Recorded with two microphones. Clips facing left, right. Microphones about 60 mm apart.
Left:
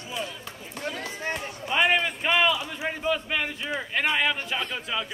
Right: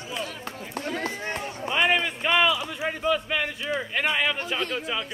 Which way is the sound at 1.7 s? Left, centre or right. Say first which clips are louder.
Even; centre.